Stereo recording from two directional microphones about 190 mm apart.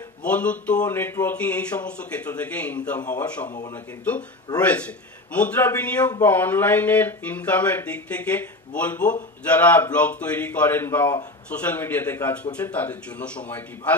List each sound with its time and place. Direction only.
0.2 s speech: 5° left (ahead or behind)
3.0 s speech: 20° left (ahead or behind)
3.7 s speech: 10° left (ahead or behind)